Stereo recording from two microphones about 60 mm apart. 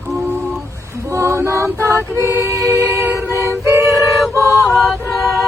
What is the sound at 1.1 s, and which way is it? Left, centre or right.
Female singing, right.